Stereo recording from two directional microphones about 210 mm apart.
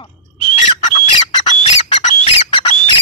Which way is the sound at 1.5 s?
35° left (ahead or behind).